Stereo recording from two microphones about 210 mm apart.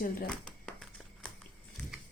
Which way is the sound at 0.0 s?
45° left (ahead or behind).